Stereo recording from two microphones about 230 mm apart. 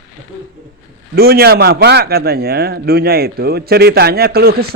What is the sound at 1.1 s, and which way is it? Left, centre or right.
A man's voice, right.